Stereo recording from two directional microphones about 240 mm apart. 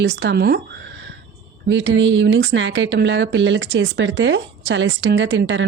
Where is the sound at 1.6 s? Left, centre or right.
Right.